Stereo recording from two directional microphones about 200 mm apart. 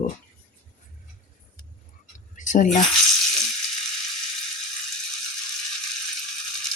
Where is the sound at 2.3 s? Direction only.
40° left (ahead or behind).